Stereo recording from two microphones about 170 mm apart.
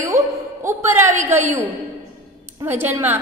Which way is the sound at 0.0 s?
20° right (ahead or behind).